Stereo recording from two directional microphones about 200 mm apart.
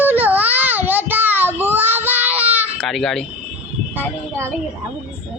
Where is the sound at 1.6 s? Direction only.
10° right (ahead or behind).